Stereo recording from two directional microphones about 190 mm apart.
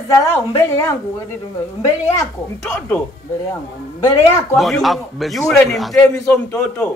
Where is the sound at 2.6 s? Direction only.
5° left (ahead or behind).